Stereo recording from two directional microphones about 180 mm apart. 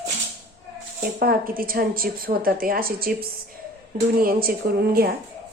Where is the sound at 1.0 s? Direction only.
55° right (ahead or behind).